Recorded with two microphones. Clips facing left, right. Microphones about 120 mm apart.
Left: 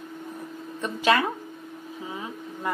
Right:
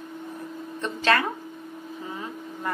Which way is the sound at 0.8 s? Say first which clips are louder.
Left 1 dB; 10° left (ahead or behind).